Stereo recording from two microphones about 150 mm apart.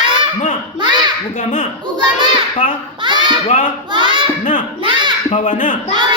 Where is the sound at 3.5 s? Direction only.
60° left (ahead or behind).